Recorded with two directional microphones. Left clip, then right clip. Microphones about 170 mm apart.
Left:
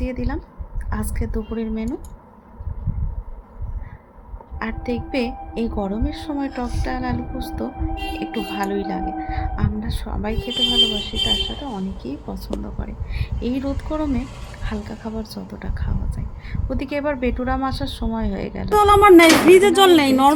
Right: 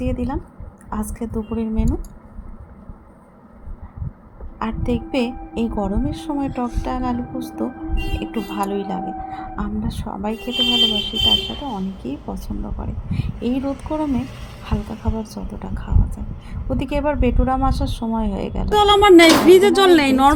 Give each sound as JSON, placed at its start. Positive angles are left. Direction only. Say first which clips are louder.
{"t": 0.0, "sound": "a woman's voice", "louder": "right 3 dB", "side_deg": -5}
{"t": 1.4, "sound": "a woman's voice", "louder": "right 2 dB", "side_deg": 0}
{"t": 4.6, "sound": "a woman's voice", "louder": "right 2 dB", "side_deg": -5}
{"t": 12.0, "sound": "speech", "louder": "right 2 dB", "side_deg": 45}
{"t": 12.6, "sound": "a woman's voice", "louder": "right 2 dB", "side_deg": 0}
{"t": 20.1, "sound": "speech", "louder": "right 1 dB", "side_deg": -10}